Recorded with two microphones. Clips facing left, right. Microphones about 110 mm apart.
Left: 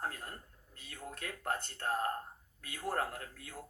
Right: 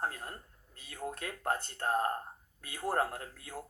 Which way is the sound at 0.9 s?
40° right (ahead or behind).